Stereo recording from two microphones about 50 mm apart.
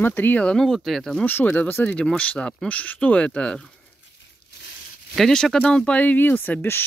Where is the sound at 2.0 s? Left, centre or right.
Left.